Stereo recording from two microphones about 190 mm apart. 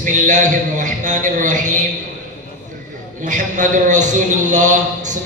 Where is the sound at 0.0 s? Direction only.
40° right (ahead or behind).